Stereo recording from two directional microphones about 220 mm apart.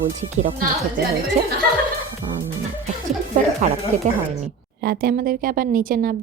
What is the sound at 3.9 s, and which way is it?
Speech, 35° right (ahead or behind).